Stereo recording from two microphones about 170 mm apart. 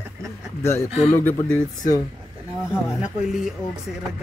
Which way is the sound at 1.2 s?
10° left (ahead or behind).